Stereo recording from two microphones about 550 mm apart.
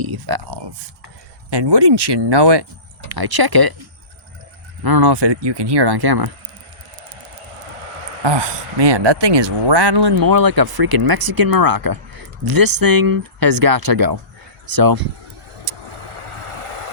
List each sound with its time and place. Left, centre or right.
0.0 s speech: right
4.8 s speech: right
8.0 s speech: right
15.9 s vehicle: right